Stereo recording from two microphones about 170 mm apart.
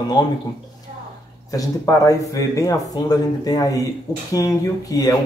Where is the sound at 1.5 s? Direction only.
20° left (ahead or behind).